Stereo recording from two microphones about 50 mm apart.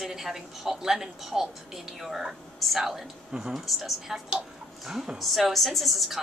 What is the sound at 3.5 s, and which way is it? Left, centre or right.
A woman's voice, centre.